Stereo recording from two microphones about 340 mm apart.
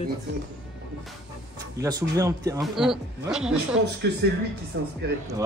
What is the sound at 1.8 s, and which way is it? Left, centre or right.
A man's voice, centre.